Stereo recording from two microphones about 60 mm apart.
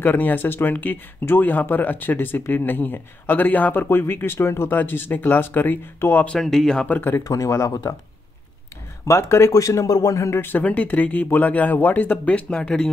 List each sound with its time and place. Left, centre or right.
0.0 s speech: left
4.7 s speech: left
6.3 s speech: centre
6.9 s speech: left
7.2 s speech: left
9.0 s speech: left
9.5 s speech: left
10.6 s speech: left